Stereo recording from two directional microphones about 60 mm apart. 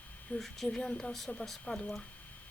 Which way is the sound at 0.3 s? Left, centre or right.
Centre.